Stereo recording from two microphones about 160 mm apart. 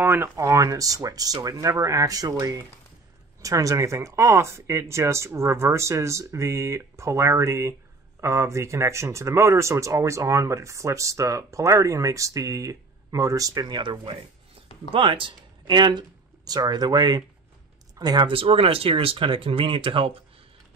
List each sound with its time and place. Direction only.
0.0 s speech: 15° right (ahead or behind); by 20.2 s 35° right (ahead or behind)